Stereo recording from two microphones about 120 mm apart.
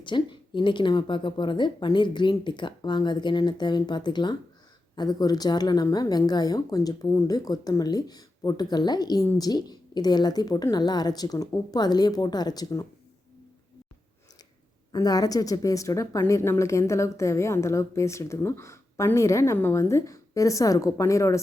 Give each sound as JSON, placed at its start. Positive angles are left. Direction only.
{"t": 0.0, "sound": "a woman's voice", "side_deg": 40}
{"t": 14.9, "sound": "a woman's voice", "side_deg": 30}